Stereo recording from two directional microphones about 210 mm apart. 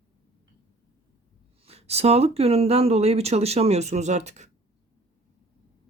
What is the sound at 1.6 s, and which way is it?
Speech, 30° right (ahead or behind).